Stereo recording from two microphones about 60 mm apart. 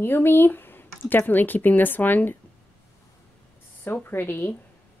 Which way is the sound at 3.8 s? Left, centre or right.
Left.